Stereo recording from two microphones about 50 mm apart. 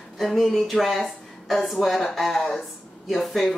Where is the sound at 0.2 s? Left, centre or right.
Centre.